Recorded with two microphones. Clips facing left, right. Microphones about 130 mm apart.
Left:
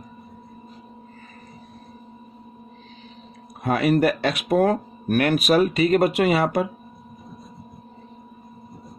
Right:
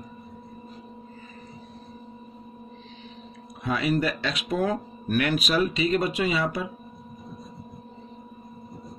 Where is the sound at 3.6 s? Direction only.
55° left (ahead or behind).